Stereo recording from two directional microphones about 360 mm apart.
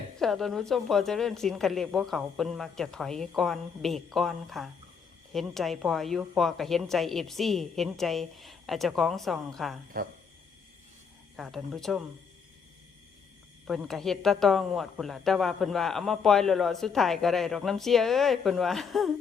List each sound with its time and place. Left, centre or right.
0.2 s speech: centre
10.0 s speech: right
11.3 s speech: centre
13.7 s speech: centre